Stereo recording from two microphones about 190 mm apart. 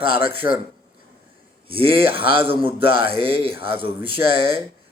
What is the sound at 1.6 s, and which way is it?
A man's voice, 30° right (ahead or behind).